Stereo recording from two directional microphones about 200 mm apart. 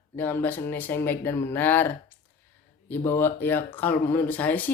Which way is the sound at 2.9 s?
10° left (ahead or behind).